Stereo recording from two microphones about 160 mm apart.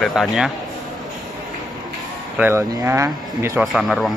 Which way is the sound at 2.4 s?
15° right (ahead or behind).